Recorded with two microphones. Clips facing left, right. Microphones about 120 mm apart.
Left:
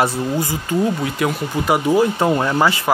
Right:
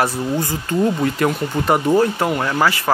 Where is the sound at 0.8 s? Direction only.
Centre (ahead or behind).